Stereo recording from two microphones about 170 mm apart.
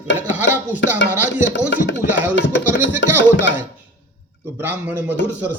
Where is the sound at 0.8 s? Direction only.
90° left.